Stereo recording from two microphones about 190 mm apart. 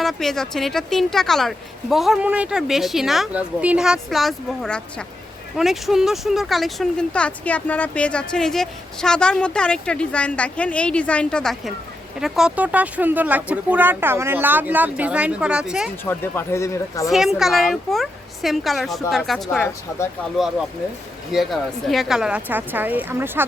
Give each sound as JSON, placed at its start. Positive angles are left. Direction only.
{"t": 0.0, "sound": "speech", "side_deg": 0}
{"t": 16.0, "sound": "speech", "side_deg": 10}
{"t": 17.1, "sound": "speech", "side_deg": 0}
{"t": 19.5, "sound": "speech", "side_deg": 10}
{"t": 21.3, "sound": "speech", "side_deg": 0}